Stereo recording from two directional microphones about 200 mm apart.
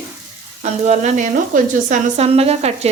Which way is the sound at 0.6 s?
35° right (ahead or behind).